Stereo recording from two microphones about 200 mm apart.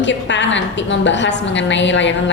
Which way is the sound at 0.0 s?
65° left (ahead or behind).